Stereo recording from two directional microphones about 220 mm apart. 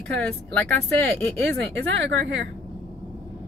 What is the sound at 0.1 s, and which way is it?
Speech, 5° left (ahead or behind).